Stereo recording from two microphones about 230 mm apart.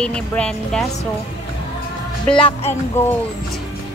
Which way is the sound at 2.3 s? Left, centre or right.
Left.